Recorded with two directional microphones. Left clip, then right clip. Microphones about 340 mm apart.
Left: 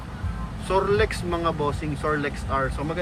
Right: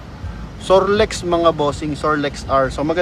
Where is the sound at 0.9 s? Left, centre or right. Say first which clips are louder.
Right 7 dB; centre.